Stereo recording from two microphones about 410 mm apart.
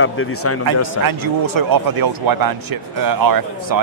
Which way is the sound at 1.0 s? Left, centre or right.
Right.